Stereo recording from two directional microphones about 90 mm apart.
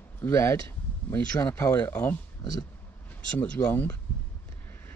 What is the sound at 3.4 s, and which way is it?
Speech, 20° left (ahead or behind).